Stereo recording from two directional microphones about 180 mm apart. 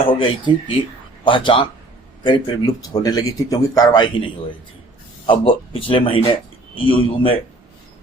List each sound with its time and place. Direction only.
0.1 s a man's voice: 30° left (ahead or behind)